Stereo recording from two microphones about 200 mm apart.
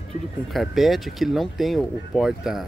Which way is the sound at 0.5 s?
Centre (ahead or behind).